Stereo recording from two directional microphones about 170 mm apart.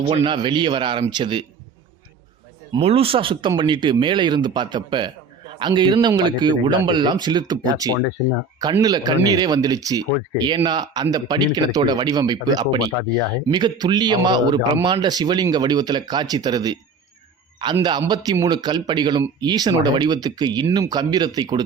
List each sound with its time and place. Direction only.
0.1 s speech: 30° right (ahead or behind)
2.7 s a man's voice: 35° right (ahead or behind)